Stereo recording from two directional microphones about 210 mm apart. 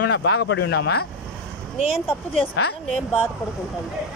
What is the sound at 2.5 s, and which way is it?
Speech, 65° left (ahead or behind).